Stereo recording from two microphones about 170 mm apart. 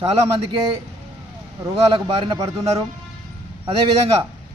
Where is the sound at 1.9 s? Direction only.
30° right (ahead or behind).